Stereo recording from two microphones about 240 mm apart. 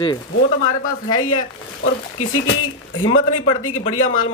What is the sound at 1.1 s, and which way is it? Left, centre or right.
Speech, left.